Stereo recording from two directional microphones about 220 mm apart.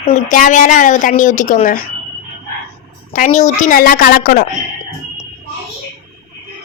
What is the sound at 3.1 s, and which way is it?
A woman's voice, 35° left (ahead or behind).